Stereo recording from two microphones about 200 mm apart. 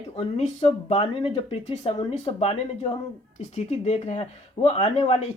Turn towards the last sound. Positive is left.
turn(degrees=30)  # may be behind; listen again after turning